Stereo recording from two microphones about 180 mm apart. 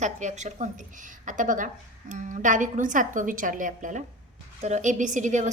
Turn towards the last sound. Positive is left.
turn(degrees=-45)  # may be behind; listen again after turning